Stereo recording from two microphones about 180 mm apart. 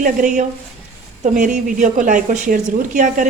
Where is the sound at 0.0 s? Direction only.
45° right (ahead or behind).